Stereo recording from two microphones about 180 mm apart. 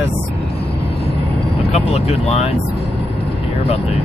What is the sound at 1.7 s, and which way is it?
Speech, 35° left (ahead or behind).